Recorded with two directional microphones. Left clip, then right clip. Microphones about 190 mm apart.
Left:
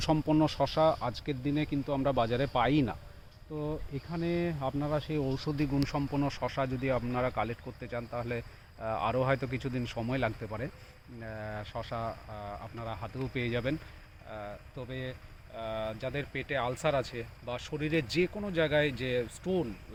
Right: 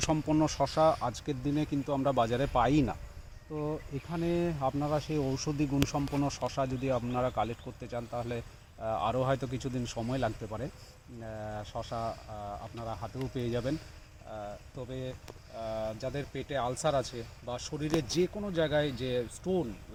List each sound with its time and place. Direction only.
0.0 s speech: 50° left (ahead or behind); by 6.3 s 10° left (ahead or behind)
6.4 s speech: 35° left (ahead or behind)
7.9 s speech: 35° left (ahead or behind)
8.8 s speech: 45° left (ahead or behind)
9.8 s speech: 15° left (ahead or behind)
11.2 s speech: 30° left (ahead or behind)